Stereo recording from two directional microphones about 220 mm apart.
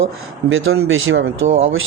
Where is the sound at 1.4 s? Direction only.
30° right (ahead or behind).